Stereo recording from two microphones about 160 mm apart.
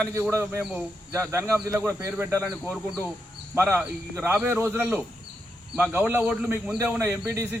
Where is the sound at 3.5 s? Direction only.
15° right (ahead or behind).